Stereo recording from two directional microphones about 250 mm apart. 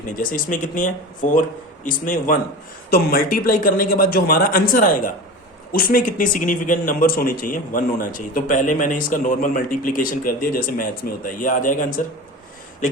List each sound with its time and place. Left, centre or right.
0.2 s speech: left